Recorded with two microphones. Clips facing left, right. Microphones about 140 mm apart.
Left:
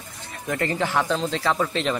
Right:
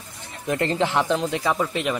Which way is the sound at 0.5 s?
20° right (ahead or behind).